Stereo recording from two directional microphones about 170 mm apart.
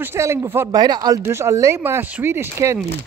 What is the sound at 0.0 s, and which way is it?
Speech, 15° right (ahead or behind).